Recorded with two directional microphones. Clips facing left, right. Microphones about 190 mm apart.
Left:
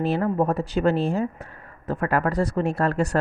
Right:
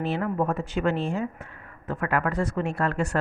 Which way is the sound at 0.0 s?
35° left (ahead or behind).